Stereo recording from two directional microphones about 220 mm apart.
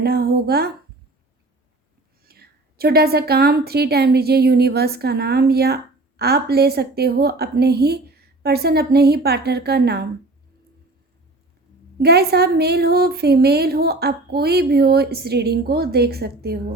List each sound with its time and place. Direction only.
0.0 s a woman's voice: 45° right (ahead or behind)
2.2 s a woman's voice: 45° right (ahead or behind)
12.0 s a woman's voice: 45° right (ahead or behind)